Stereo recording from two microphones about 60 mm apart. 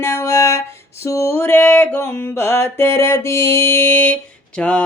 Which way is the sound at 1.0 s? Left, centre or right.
Left.